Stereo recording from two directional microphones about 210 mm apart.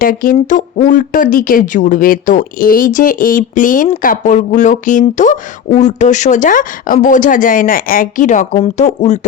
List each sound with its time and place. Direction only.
0.0 s speech: 40° left (ahead or behind)